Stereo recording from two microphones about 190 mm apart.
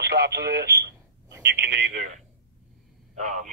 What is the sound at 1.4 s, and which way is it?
Speech, 75° right (ahead or behind).